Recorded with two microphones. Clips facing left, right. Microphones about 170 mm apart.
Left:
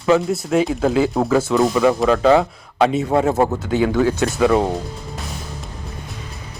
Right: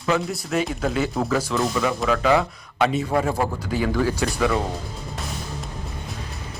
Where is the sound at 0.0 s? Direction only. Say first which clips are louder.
Left 7 dB; 25° left (ahead or behind).